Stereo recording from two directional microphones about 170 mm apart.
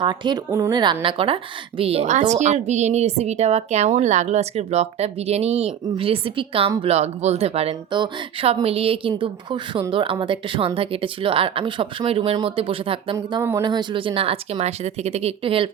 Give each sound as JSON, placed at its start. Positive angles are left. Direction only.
{"t": 0.0, "sound": "a woman's voice", "side_deg": -25}
{"t": 13.1, "sound": "a woman's voice", "side_deg": -15}